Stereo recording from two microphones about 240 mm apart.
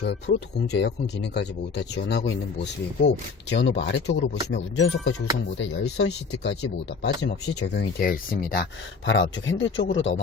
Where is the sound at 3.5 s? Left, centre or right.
Left.